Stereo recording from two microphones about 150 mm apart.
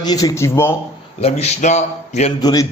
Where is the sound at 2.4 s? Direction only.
25° left (ahead or behind).